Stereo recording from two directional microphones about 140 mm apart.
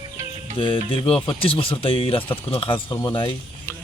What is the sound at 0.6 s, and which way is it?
A man's voice, 40° left (ahead or behind).